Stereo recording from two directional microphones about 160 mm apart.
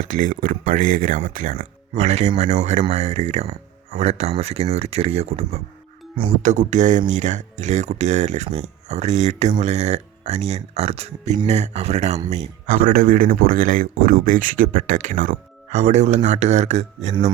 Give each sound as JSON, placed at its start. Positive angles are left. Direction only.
{"t": 0.0, "sound": "speech", "side_deg": -50}
{"t": 6.4, "sound": "speech", "side_deg": -50}
{"t": 12.3, "sound": "speech", "side_deg": -60}